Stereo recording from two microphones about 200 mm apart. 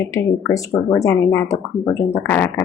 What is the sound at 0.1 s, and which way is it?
Speech, 15° left (ahead or behind).